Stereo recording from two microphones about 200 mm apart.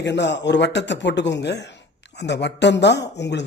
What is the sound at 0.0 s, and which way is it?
Speech, 60° left (ahead or behind).